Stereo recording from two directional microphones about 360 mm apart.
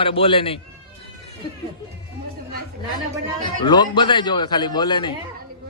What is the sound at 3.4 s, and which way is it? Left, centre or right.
A man's voice, centre.